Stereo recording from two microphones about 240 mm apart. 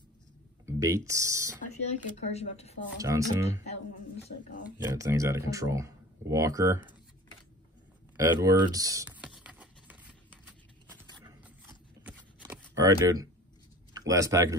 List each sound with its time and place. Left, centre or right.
0.7 s speech: centre
1.7 s speech: left
3.0 s speech: centre
4.8 s speech: centre
8.2 s computer keyboard: centre
11.0 s a sound: centre
12.7 s speech: centre